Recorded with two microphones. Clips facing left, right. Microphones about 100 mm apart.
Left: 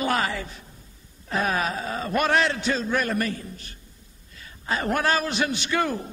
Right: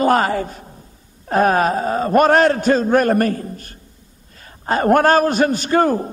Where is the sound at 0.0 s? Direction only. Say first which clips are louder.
Right 9 dB; 45° right (ahead or behind).